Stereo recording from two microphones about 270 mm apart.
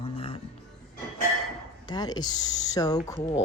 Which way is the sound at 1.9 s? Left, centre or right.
Centre.